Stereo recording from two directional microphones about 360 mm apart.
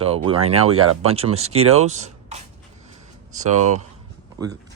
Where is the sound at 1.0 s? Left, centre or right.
Centre.